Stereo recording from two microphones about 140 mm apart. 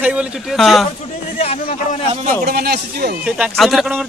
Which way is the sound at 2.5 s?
90° right.